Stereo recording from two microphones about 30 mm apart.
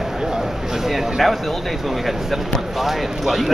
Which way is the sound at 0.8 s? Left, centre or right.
Centre.